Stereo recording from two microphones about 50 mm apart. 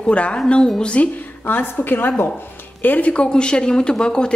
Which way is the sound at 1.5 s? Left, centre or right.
Left.